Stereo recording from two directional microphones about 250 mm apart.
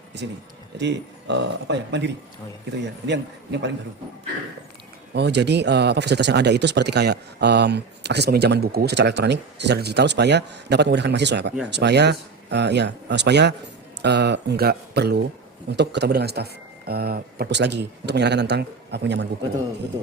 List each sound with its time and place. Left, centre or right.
0.8 s speech: right
5.1 s speech: right